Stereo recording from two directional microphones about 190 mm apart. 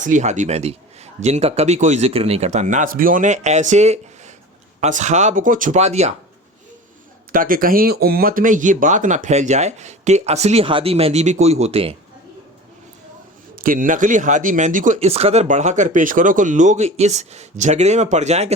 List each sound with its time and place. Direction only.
0.0 s speech: 40° right (ahead or behind)
7.3 s speech: 50° right (ahead or behind); by 11.9 s 30° right (ahead or behind)
13.6 s speech: 45° right (ahead or behind)